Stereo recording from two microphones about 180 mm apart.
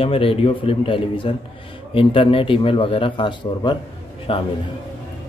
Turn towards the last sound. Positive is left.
turn(degrees=30)  # may be behind; listen again after turning